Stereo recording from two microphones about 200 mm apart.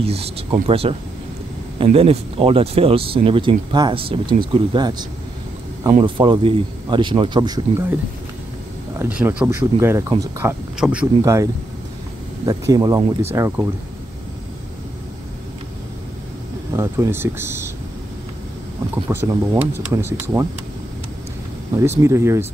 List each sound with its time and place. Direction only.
0.0 s speech: 30° right (ahead or behind)
8.9 s speech: 10° right (ahead or behind)
10.8 s speech: 5° right (ahead or behind)
12.4 s speech: 20° right (ahead or behind)
16.7 s speech: 15° right (ahead or behind)
19.0 s speech: 15° right (ahead or behind)
21.7 s speech: 15° right (ahead or behind)